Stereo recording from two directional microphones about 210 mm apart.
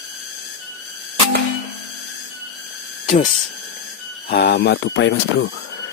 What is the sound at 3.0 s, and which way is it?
Speech, 30° left (ahead or behind).